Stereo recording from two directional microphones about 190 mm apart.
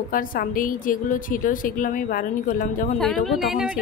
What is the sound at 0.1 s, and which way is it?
A woman's voice, 45° left (ahead or behind).